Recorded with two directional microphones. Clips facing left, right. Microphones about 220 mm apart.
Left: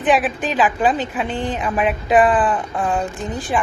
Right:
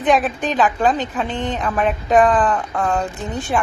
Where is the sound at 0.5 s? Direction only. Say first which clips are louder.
Even; 5° left (ahead or behind).